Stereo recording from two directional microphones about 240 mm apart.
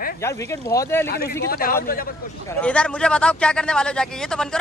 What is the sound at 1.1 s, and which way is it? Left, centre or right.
Speech, left.